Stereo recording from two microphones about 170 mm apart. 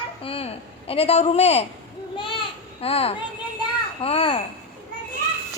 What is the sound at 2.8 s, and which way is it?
A woman's voice, 35° left (ahead or behind).